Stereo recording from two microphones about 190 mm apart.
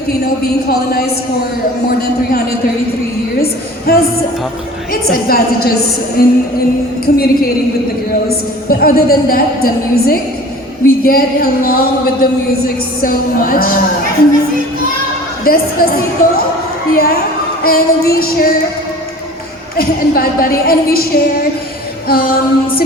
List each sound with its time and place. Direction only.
0.4 s speech: 55° left (ahead or behind)
3.9 s speech: 55° left (ahead or behind)
5.0 s speech: 50° left (ahead or behind)
8.7 s speech: 50° left (ahead or behind)
15.4 s speech: 50° left (ahead or behind)
19.7 s speech: 50° left (ahead or behind)